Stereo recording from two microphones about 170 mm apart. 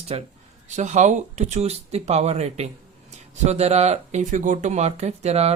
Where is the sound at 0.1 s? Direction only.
35° right (ahead or behind).